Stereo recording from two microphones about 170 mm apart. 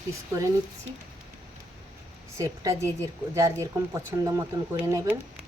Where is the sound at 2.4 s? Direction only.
20° right (ahead or behind).